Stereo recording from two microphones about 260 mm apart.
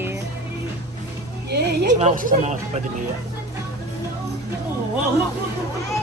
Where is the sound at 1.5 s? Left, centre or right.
Right.